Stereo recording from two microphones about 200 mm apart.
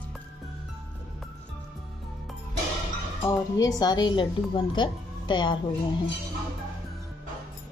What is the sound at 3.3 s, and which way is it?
A woman's voice, 20° left (ahead or behind).